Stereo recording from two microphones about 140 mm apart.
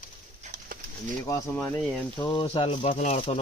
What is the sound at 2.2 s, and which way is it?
Speech, 35° left (ahead or behind).